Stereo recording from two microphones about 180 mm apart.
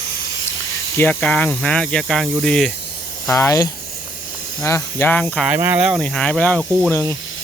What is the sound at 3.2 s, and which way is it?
Speech, 15° left (ahead or behind).